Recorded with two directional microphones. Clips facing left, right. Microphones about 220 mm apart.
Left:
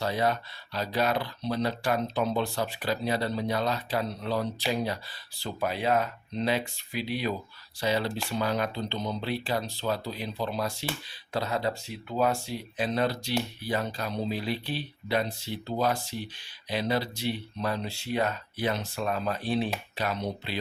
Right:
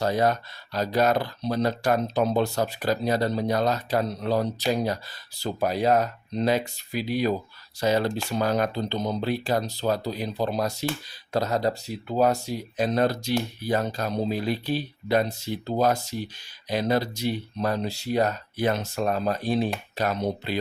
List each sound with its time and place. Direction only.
0.0 s speech: 45° right (ahead or behind)